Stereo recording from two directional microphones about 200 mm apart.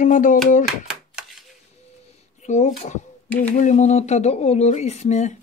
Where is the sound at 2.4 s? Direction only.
35° left (ahead or behind).